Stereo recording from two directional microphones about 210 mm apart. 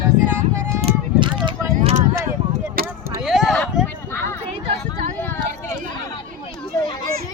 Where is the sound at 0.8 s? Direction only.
20° right (ahead or behind).